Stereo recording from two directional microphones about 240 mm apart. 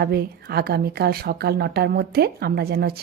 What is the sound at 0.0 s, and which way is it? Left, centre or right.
Speech, right.